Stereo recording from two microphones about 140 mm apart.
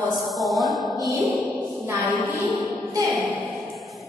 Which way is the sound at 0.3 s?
Centre (ahead or behind).